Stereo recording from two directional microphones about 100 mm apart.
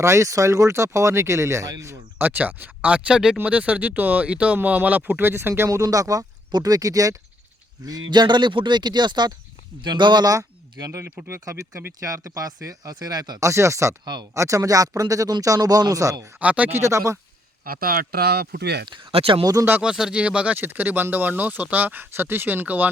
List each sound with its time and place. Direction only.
0.0 s speech: 30° right (ahead or behind)
13.4 s speech: 30° right (ahead or behind)
14.0 s speech: 45° right (ahead or behind)
14.3 s speech: 30° right (ahead or behind)
16.4 s speech: 15° right (ahead or behind)
16.8 s speech: 30° right (ahead or behind)
19.1 s speech: 65° right (ahead or behind)
19.8 s speech: 5° right (ahead or behind)